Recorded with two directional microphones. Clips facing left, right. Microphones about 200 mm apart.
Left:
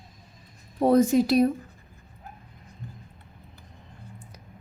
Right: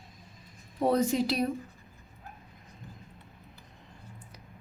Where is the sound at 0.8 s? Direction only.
50° left (ahead or behind).